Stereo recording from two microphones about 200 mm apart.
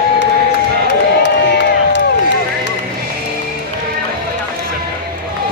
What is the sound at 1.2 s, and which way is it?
Crowd, 60° left (ahead or behind).